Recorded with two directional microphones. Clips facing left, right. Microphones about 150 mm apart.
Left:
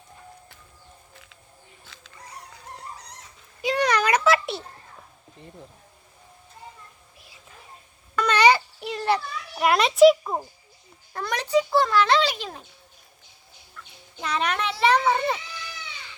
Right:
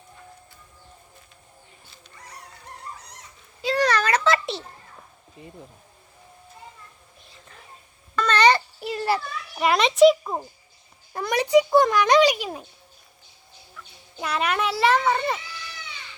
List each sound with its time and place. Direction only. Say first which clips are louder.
3.6 s a sound: even; 15° left (ahead or behind)
5.4 s speech: right 3 dB; 5° right (ahead or behind)
8.1 s a sound: even; 10° left (ahead or behind)
11.1 s a child's voice: right 4 dB; 15° right (ahead or behind)
13.8 s fowl: even; 5° right (ahead or behind)
14.2 s a child's voice: right 2 dB; 5° right (ahead or behind)